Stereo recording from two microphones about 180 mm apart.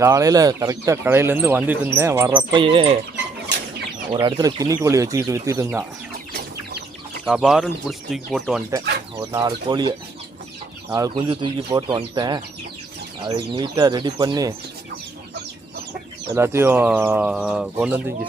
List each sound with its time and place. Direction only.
0.0 s speech: 20° right (ahead or behind)
2.3 s speech: 25° right (ahead or behind)
4.1 s speech: 25° right (ahead or behind)
7.3 s speech: centre (ahead or behind)
9.3 s speech: 25° right (ahead or behind)
16.3 s speech: 15° right (ahead or behind)